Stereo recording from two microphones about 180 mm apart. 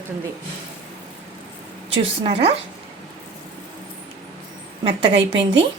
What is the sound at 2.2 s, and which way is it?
Speech, 35° right (ahead or behind).